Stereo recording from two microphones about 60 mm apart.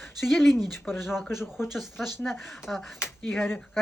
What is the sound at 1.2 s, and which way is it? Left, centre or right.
Speech, left.